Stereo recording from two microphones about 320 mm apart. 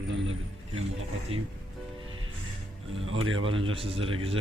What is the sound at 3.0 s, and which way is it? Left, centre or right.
Speech, right.